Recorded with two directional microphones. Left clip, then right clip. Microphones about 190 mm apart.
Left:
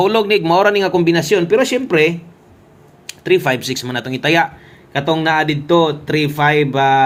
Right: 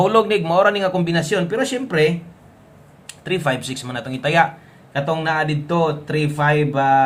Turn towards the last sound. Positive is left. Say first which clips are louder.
# left 3 dB
turn(degrees=35)  # may be behind; listen again after turning